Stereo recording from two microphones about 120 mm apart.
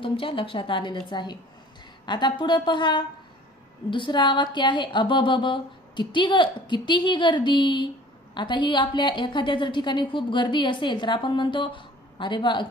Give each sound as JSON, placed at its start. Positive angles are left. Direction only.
{"t": 0.0, "sound": "a woman's voice", "side_deg": 45}